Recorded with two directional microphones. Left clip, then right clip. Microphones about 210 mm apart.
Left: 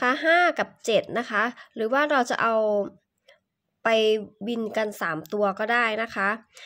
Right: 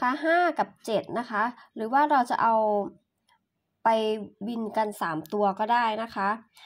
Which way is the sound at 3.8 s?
20° left (ahead or behind).